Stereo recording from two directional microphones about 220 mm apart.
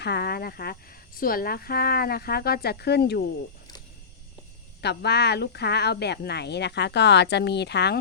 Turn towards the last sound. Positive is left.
turn(degrees=50)  # may be behind; listen again after turning